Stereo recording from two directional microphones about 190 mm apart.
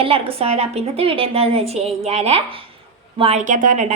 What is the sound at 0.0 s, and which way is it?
A woman's voice, 30° right (ahead or behind).